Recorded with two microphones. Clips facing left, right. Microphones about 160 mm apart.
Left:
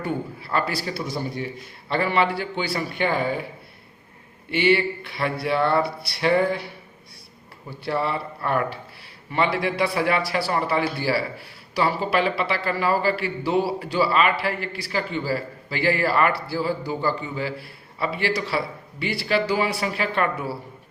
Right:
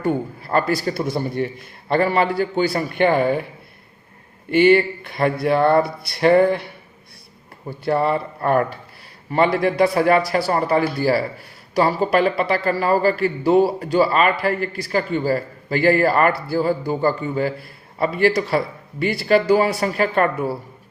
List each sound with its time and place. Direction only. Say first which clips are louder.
0.0 s a man's voice: right 6 dB; 45° right (ahead or behind)
4.5 s a man's voice: right 6 dB; 45° right (ahead or behind)
7.7 s a man's voice: right 6 dB; 50° right (ahead or behind)